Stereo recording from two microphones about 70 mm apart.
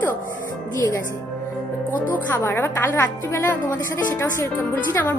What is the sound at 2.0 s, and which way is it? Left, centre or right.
A woman's voice, left.